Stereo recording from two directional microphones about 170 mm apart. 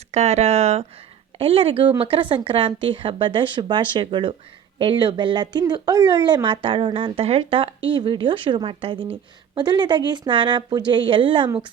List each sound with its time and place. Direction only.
0.1 s speech: 40° right (ahead or behind)